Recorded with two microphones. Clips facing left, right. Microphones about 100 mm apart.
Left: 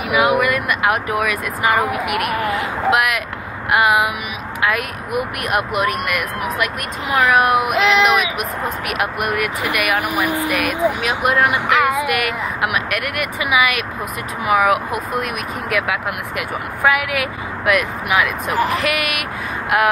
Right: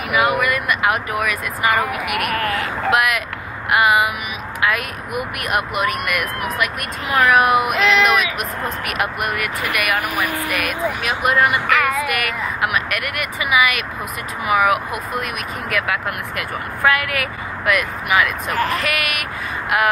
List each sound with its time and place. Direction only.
0.1 s speech: centre (ahead or behind)
2.3 s speech: 20° left (ahead or behind)
2.9 s speech: centre (ahead or behind)
10.7 s speech: 15° left (ahead or behind)
11.0 s speech: 5° left (ahead or behind)
11.5 s a sound: 20° left (ahead or behind)
12.1 s speech: centre (ahead or behind)